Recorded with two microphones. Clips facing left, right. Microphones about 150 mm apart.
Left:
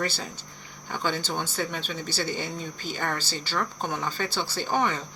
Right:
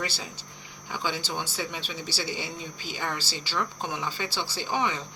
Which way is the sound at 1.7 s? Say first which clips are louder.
Left 3 dB; 50° left (ahead or behind).